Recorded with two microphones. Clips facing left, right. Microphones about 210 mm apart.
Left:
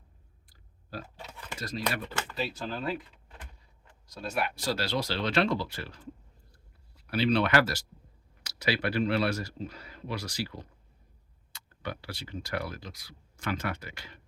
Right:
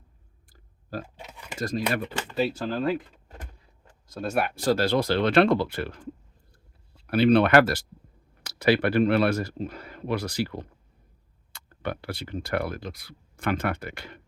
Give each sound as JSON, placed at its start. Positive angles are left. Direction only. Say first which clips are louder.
{"t": 0.5, "sound": "chewing", "louder": "right 6 dB", "side_deg": -50}
{"t": 1.0, "sound": "a sound", "louder": "right 2 dB", "side_deg": -15}
{"t": 1.5, "sound": "speech", "louder": "right 6 dB", "side_deg": -50}
{"t": 7.1, "sound": "speech", "louder": "right 7 dB", "side_deg": -55}